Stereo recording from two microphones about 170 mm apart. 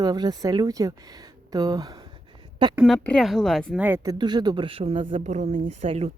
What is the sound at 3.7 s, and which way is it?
Speech, 10° right (ahead or behind).